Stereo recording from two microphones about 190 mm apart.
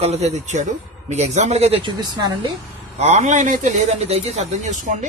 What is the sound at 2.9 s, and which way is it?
A man's voice, 35° right (ahead or behind).